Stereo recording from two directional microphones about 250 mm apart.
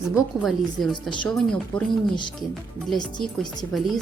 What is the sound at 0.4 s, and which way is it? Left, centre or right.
Speech, centre.